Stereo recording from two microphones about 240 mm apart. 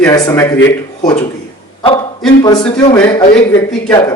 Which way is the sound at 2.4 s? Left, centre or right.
Centre.